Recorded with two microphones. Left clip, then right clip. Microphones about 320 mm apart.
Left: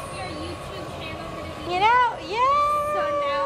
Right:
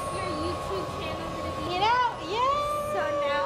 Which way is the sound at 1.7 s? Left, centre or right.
Centre.